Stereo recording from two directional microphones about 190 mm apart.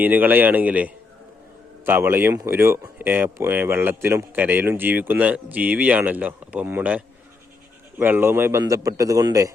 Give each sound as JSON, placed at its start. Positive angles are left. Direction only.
{"t": 0.0, "sound": "speech", "side_deg": -10}